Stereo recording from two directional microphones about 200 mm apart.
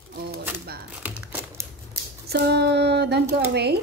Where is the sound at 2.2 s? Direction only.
55° right (ahead or behind).